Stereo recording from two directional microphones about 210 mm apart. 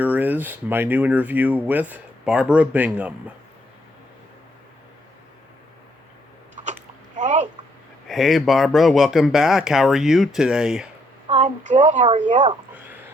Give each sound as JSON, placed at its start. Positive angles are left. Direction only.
{"t": 0.0, "sound": "speech", "side_deg": -10}
{"t": 7.2, "sound": "a sound", "side_deg": -35}
{"t": 8.0, "sound": "speech", "side_deg": 0}
{"t": 11.3, "sound": "a woman's voice", "side_deg": -35}